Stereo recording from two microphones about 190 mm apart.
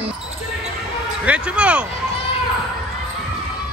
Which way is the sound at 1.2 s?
5° right (ahead or behind).